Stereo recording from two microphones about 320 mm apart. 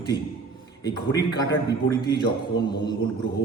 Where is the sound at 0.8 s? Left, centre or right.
Centre.